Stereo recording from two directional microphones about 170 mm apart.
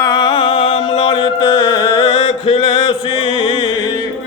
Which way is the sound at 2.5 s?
30° left (ahead or behind).